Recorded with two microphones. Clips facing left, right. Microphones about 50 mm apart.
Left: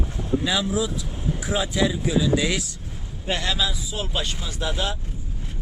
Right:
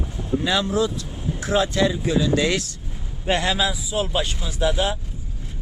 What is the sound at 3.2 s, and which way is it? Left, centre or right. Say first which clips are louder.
Speech: right 4 dB; centre.